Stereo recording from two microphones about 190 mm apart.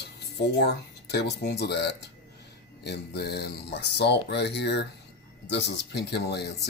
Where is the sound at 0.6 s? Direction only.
60° left (ahead or behind).